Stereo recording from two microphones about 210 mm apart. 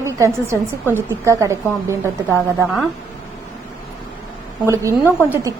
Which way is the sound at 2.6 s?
Centre (ahead or behind).